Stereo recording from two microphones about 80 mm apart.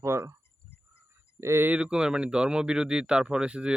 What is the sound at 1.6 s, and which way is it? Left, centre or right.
A man's voice, centre.